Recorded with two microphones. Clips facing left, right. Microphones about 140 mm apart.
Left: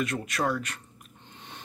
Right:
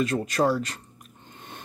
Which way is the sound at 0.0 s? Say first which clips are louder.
Right 5 dB; 35° right (ahead or behind).